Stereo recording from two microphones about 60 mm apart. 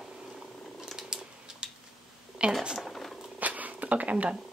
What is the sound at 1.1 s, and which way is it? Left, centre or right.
Purr, centre.